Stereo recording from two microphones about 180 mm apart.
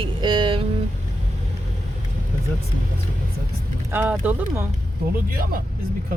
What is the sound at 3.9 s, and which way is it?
Speech, 10° right (ahead or behind).